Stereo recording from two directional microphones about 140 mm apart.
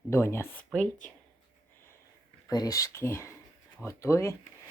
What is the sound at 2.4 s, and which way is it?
Speech, 25° left (ahead or behind).